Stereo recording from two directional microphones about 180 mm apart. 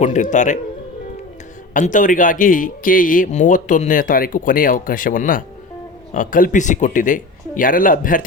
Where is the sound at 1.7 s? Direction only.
45° left (ahead or behind).